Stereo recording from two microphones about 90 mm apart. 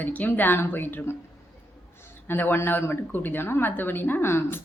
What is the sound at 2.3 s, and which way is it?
Speech, 25° left (ahead or behind).